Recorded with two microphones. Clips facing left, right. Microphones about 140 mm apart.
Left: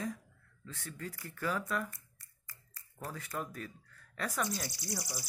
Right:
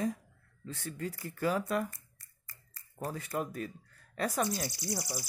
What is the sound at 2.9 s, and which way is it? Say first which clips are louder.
Speech: right 5 dB; 25° right (ahead or behind).